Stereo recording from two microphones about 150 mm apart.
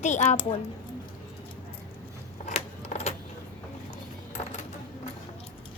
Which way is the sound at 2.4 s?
50° left (ahead or behind).